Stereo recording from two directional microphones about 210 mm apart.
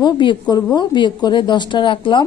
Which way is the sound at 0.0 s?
20° left (ahead or behind).